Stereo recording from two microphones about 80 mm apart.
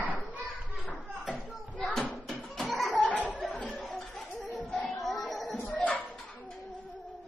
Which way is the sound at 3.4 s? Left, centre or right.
Centre.